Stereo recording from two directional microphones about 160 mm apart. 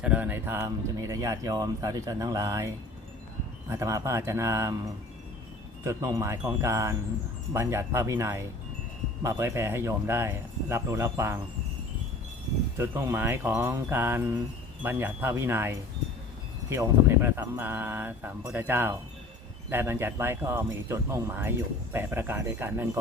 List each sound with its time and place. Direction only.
0.0 s speech: 10° right (ahead or behind)
3.7 s speech: 20° right (ahead or behind)
5.8 s speech: 20° right (ahead or behind)
12.7 s speech: 15° right (ahead or behind)